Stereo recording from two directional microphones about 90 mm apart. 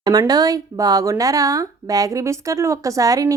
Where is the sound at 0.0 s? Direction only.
45° right (ahead or behind).